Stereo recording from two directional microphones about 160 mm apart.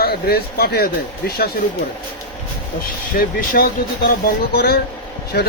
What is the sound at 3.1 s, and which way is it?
Speech, 65° left (ahead or behind).